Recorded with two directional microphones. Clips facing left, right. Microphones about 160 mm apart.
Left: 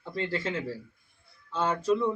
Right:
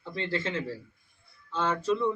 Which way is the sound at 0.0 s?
10° left (ahead or behind).